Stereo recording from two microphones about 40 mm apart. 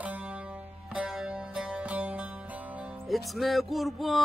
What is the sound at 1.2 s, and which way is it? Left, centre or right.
Music, right.